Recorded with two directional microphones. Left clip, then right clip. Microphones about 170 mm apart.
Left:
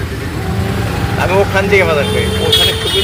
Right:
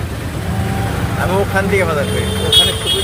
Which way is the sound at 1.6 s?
10° right (ahead or behind).